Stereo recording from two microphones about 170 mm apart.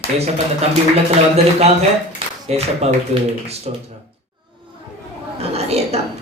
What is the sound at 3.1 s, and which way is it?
Speech, 35° right (ahead or behind).